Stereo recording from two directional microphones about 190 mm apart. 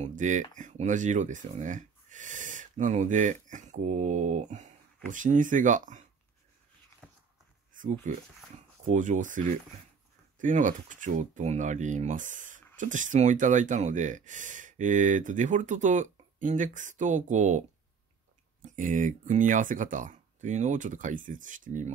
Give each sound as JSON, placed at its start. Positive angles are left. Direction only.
{"t": 0.0, "sound": "speech", "side_deg": -40}
{"t": 7.7, "sound": "speech", "side_deg": -45}